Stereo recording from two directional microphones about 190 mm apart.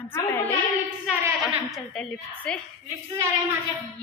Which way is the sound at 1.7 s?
Centre (ahead or behind).